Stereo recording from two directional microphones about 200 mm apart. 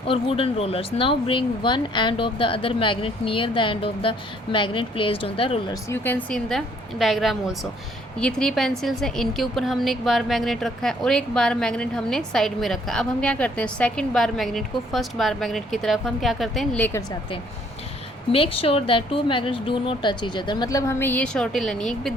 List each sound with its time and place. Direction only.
0.1 s speech: 30° left (ahead or behind)
5.9 s a woman's voice: 10° left (ahead or behind)
18.3 s speech: 30° left (ahead or behind); by 22.1 s centre (ahead or behind)